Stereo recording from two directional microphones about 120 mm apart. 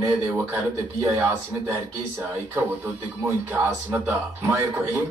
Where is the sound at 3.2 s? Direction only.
15° right (ahead or behind).